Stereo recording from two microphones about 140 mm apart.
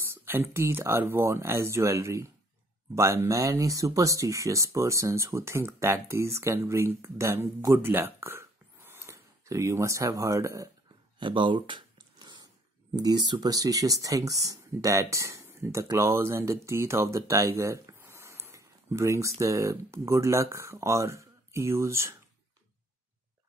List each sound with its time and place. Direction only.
0.1 s speech: 15° right (ahead or behind)
11.1 s a sound: 35° right (ahead or behind)
12.9 s speech: 30° right (ahead or behind)